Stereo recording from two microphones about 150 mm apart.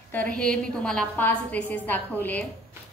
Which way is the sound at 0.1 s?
10° left (ahead or behind).